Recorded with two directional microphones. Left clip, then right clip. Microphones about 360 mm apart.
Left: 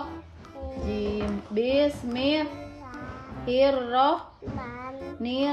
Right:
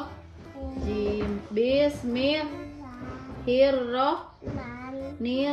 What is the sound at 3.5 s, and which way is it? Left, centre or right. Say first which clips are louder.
Speech: even; centre.